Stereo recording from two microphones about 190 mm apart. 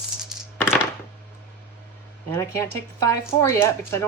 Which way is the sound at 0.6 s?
10° left (ahead or behind).